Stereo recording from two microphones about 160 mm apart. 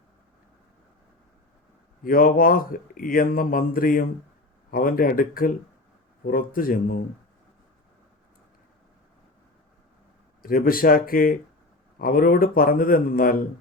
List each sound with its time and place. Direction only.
2.0 s speech: 65° left (ahead or behind)
10.4 s speech: 65° left (ahead or behind)